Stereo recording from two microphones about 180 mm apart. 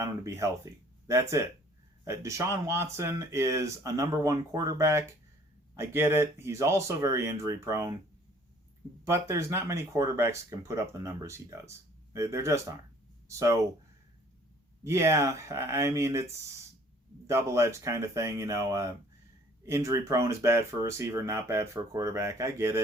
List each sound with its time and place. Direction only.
0.0 s speech: 15° right (ahead or behind)
9.0 s speech: 15° right (ahead or behind)
14.8 s speech: 15° right (ahead or behind)